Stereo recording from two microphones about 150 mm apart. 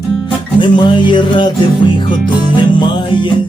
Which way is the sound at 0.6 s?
30° left (ahead or behind).